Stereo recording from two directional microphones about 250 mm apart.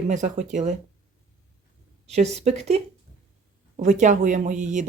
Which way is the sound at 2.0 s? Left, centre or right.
Right.